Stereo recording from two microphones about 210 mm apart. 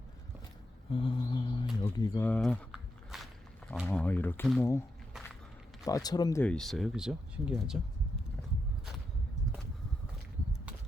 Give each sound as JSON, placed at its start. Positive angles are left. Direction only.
{"t": 0.9, "sound": "mantra", "side_deg": 25}
{"t": 1.8, "sound": "a sound", "side_deg": 15}
{"t": 3.7, "sound": "speech", "side_deg": 5}
{"t": 5.8, "sound": "speech", "side_deg": 15}
{"t": 6.4, "sound": "speech", "side_deg": 5}